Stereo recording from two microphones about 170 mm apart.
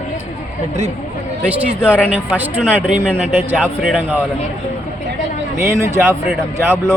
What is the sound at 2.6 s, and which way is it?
Speech, 5° left (ahead or behind).